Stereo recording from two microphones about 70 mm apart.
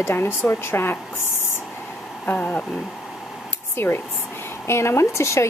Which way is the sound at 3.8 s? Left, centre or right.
Left.